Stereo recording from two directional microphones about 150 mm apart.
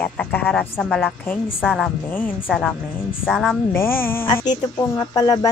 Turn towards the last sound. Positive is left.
turn(degrees=25)  # may be behind; listen again after turning